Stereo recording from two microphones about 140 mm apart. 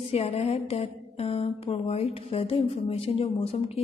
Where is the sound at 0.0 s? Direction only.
45° left (ahead or behind).